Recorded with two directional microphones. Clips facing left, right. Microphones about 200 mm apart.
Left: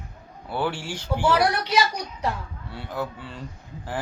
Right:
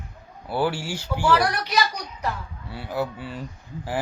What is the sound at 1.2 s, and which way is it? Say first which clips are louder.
Speech: even; 25° left (ahead or behind).